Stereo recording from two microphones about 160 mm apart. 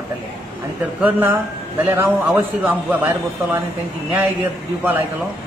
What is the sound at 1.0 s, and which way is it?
A man's voice, 10° right (ahead or behind).